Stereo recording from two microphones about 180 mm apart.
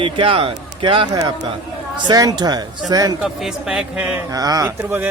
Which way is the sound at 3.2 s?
Centre (ahead or behind).